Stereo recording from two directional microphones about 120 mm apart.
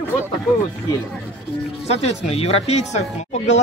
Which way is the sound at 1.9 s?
60° left (ahead or behind).